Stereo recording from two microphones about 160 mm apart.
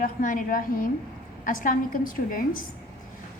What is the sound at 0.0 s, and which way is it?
A woman's voice, 60° left (ahead or behind).